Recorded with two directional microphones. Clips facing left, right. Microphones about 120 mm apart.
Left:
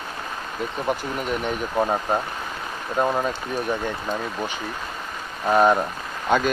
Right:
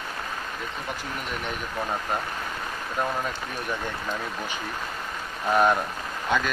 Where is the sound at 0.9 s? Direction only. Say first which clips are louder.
Left 12 dB; 55° left (ahead or behind).